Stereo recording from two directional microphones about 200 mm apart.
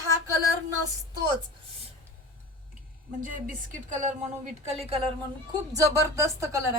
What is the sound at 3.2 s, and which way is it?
A woman's voice, 40° right (ahead or behind).